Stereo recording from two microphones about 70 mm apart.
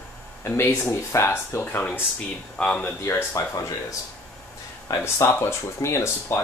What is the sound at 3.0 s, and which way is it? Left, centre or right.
Speech, left.